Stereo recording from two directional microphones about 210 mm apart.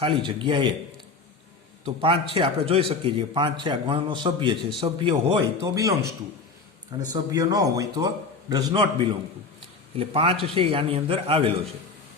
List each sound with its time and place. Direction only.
0.0 s a man's voice: 25° right (ahead or behind)
1.8 s a man's voice: 25° right (ahead or behind)
7.1 s a man's voice: 15° right (ahead or behind)